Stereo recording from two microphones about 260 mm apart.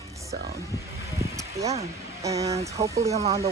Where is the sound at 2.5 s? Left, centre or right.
Centre.